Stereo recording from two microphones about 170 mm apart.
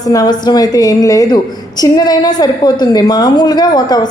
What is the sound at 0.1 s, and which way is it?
Speech, 25° left (ahead or behind).